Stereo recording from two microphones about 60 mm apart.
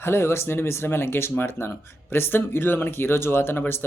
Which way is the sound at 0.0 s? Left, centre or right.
Left.